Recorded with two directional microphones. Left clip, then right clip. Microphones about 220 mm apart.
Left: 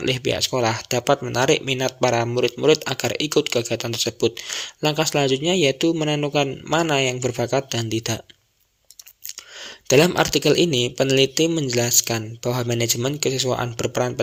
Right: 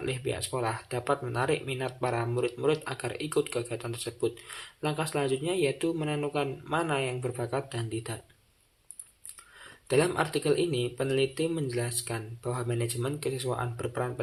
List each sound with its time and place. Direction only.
0.0 s speech: 40° left (ahead or behind)
9.2 s speech: 40° left (ahead or behind)